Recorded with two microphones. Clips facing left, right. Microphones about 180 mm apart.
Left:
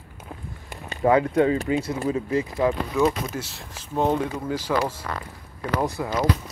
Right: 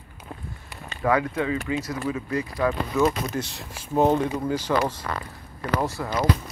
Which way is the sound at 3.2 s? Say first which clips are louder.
Right 2 dB; 5° left (ahead or behind).